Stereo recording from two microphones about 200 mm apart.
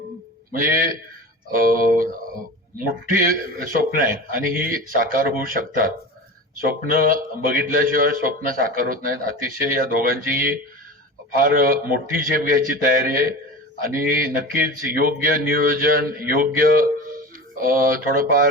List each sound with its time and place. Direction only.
1.5 s a man's voice: 45° right (ahead or behind)
11.4 s a man's voice: 45° right (ahead or behind)